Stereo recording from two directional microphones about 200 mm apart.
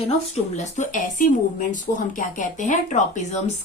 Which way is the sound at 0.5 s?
35° left (ahead or behind).